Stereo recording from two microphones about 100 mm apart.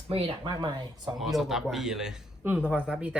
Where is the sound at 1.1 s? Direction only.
Centre (ahead or behind).